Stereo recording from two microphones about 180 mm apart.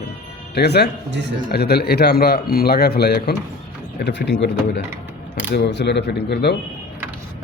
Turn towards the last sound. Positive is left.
turn(degrees=65)  # may be behind; listen again after turning